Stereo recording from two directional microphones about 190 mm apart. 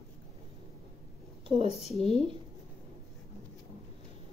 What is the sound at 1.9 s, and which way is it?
Speech, 5° left (ahead or behind).